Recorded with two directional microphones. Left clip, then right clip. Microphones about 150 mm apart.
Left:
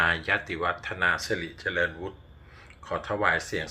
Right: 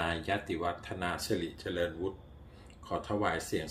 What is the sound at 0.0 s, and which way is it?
Speech, 45° right (ahead or behind).